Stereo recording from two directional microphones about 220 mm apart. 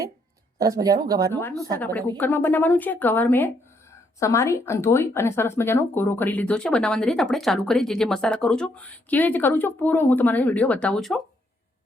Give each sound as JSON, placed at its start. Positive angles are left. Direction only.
{"t": 0.6, "sound": "speech", "side_deg": -15}
{"t": 1.3, "sound": "speech", "side_deg": 10}
{"t": 1.5, "sound": "speech", "side_deg": -15}
{"t": 1.8, "sound": "speech", "side_deg": 5}